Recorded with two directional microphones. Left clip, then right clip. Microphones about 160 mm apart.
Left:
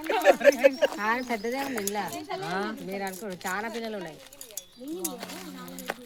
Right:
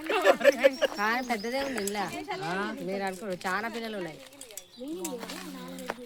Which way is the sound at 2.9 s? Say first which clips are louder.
Right 2 dB; 25° right (ahead or behind).